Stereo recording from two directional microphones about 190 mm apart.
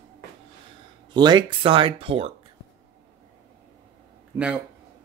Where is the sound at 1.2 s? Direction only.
25° right (ahead or behind).